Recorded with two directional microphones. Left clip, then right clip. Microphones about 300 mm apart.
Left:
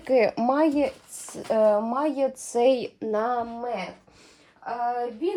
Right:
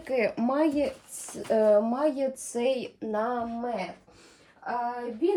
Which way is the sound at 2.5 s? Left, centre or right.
Left.